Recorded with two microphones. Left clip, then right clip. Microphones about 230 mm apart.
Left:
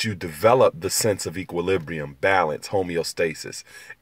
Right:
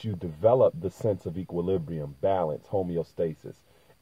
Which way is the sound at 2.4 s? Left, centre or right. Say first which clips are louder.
Left 5 dB; left.